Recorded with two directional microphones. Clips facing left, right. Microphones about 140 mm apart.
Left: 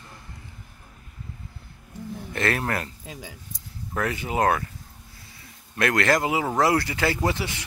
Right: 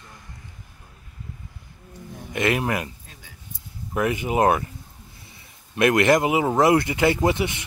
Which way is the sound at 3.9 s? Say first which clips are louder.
Right 4 dB; 20° right (ahead or behind).